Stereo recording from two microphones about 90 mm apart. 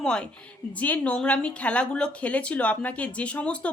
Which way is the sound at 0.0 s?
10° left (ahead or behind).